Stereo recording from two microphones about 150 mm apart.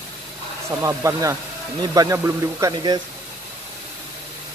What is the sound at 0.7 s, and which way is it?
Speech, 20° right (ahead or behind).